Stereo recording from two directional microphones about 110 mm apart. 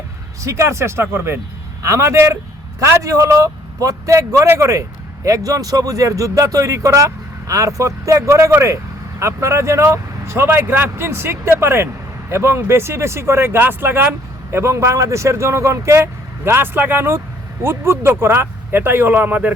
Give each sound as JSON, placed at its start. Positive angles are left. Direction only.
{"t": 0.4, "sound": "a man's voice", "side_deg": -25}